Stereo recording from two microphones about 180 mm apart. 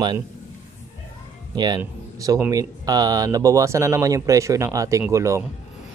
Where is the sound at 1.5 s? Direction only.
25° right (ahead or behind).